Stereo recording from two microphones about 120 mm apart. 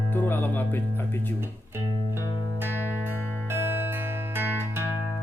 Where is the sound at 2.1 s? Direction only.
20° right (ahead or behind).